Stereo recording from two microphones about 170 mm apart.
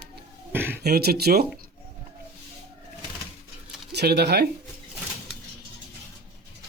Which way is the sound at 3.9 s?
70° right (ahead or behind).